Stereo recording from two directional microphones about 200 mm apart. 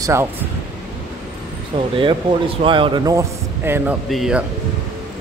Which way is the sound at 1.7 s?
25° right (ahead or behind).